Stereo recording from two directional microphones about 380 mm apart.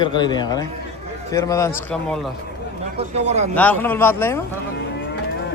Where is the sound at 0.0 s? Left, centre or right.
Centre.